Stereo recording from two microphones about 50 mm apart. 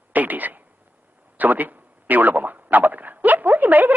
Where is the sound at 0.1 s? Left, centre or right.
Right.